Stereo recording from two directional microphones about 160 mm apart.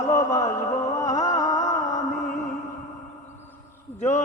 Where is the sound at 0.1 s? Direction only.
20° left (ahead or behind).